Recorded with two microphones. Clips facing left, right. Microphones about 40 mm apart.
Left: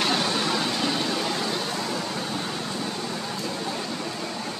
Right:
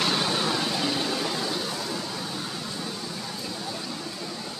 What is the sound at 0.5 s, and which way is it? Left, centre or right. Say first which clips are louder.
Vehicle: left 1 dB; centre.